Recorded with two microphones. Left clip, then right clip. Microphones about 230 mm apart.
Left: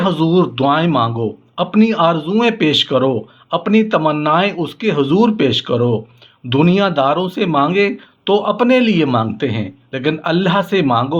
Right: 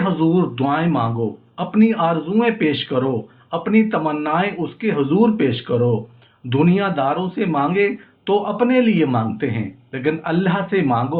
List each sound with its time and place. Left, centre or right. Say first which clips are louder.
0.0 s speech: left 4 dB; left